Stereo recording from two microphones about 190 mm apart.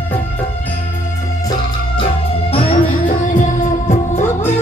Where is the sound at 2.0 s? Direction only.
30° left (ahead or behind).